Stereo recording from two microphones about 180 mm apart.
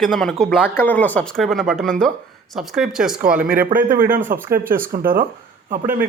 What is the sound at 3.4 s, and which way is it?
Speech, 50° right (ahead or behind).